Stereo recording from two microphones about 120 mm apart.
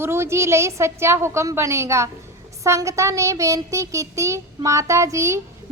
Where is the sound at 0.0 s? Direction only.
20° right (ahead or behind).